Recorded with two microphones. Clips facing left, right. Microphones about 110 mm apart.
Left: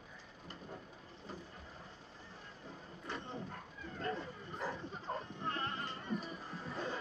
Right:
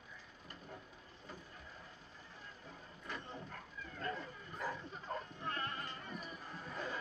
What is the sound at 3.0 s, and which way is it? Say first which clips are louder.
Dog: left 3 dB; 30° left (ahead or behind).